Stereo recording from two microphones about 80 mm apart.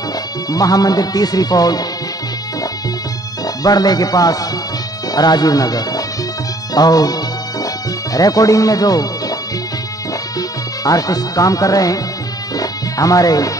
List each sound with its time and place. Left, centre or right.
0.5 s speech: left
3.4 s speech: left
10.8 s speech: left
12.5 s music: left